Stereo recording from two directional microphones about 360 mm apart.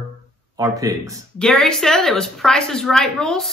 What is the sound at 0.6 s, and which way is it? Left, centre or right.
Speech, centre.